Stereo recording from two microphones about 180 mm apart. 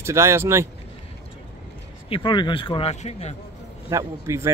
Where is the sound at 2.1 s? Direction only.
25° left (ahead or behind).